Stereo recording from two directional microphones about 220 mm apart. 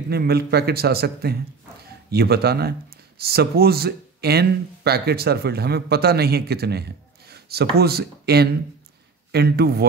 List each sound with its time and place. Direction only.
0.1 s speech: 45° right (ahead or behind)